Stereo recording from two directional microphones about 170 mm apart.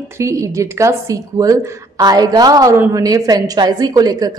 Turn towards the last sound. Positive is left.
turn(degrees=-20)  # may be behind; listen again after turning